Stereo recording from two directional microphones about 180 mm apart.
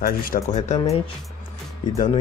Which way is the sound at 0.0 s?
55° left (ahead or behind).